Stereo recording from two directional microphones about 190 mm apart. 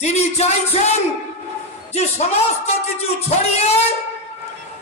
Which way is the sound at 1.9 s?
35° left (ahead or behind).